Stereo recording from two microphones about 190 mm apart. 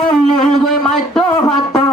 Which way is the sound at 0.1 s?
Centre (ahead or behind).